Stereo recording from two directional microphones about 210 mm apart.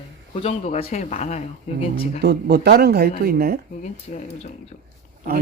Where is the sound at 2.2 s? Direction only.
50° right (ahead or behind).